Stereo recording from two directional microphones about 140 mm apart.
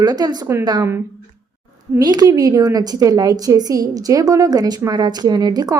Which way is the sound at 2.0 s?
30° right (ahead or behind).